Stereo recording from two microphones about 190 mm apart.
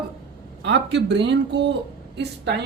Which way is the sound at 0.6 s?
65° right (ahead or behind).